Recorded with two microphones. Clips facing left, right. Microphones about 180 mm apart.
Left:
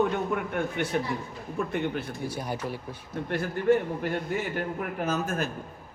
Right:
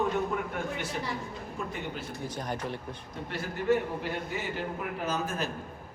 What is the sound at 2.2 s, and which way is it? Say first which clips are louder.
Speech: right 1 dB; 10° left (ahead or behind).